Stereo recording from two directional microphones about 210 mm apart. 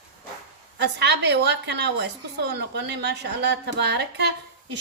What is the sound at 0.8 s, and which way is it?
A woman's voice, 55° right (ahead or behind).